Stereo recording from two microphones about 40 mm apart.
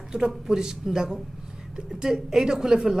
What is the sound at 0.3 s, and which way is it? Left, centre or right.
Speech, centre.